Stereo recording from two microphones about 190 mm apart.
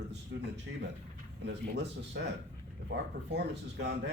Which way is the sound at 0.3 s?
65° right (ahead or behind).